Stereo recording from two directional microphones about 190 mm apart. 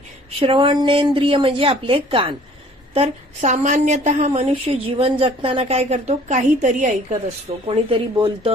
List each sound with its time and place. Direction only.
0.4 s a woman's voice: 25° right (ahead or behind)
7.6 s speech: 25° right (ahead or behind)